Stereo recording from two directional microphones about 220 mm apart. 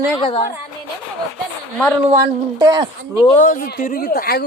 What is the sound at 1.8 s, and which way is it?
Speech, centre (ahead or behind).